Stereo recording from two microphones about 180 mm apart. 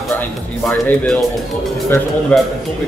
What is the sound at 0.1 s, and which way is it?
A man's voice, 10° left (ahead or behind).